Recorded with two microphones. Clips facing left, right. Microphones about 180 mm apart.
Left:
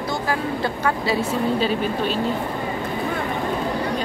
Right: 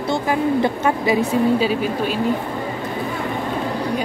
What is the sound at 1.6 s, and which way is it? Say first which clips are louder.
Speech: right 2 dB; 10° right (ahead or behind).